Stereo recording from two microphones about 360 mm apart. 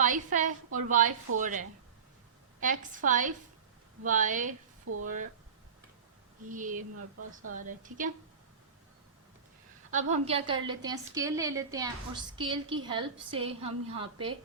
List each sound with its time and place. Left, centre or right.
0.0 s a woman's voice: right
6.5 s a woman's voice: right
6.9 s speech: right
7.5 s a woman's voice: right
9.9 s a woman's voice: centre